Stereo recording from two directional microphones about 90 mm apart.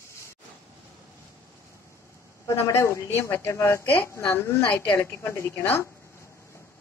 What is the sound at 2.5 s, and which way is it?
A woman's voice, 30° left (ahead or behind).